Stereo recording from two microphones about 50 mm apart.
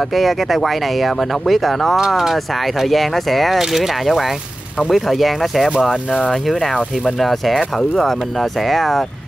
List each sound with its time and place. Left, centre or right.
0.1 s speech: centre
5.9 s speech: centre
6.4 s speech: centre